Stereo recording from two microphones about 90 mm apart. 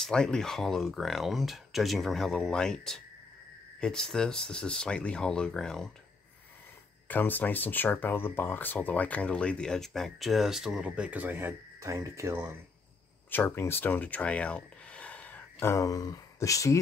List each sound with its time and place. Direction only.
0.0 s speech: 5° left (ahead or behind)
7.1 s speech: 20° left (ahead or behind); by 12.5 s 25° right (ahead or behind)
13.3 s speech: 25° left (ahead or behind)
15.6 s speech: 35° left (ahead or behind)